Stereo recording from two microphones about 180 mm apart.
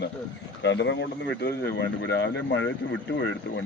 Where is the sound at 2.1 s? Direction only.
75° left (ahead or behind).